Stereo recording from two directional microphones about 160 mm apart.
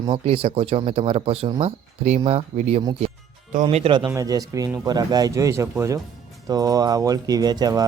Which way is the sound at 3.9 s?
25° right (ahead or behind).